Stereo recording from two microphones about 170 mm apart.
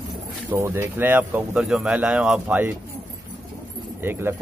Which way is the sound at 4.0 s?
15° right (ahead or behind).